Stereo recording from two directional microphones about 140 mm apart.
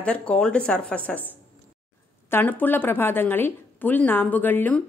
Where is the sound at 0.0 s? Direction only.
10° left (ahead or behind).